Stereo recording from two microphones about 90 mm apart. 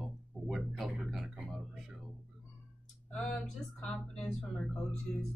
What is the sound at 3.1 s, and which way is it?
Speech, 10° left (ahead or behind).